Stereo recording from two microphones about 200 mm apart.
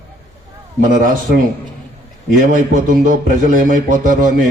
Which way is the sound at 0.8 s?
40° right (ahead or behind).